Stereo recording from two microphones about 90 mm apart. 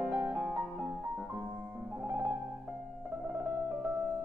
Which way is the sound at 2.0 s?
30° right (ahead or behind).